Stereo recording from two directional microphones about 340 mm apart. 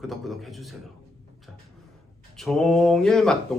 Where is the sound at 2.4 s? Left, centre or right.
Centre.